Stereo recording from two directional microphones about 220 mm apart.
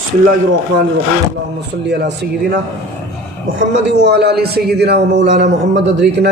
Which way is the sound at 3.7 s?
50° right (ahead or behind).